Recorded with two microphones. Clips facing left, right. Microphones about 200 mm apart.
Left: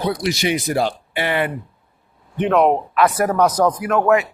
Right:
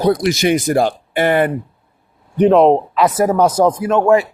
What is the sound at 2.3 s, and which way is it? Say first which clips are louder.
Speech: right 6 dB; 35° right (ahead or behind).